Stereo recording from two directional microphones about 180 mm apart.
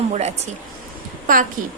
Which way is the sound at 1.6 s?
45° right (ahead or behind).